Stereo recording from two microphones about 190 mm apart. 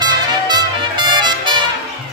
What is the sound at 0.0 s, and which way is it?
Music, 20° right (ahead or behind).